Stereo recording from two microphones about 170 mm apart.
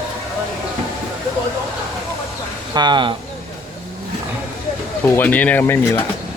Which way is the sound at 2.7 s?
25° right (ahead or behind).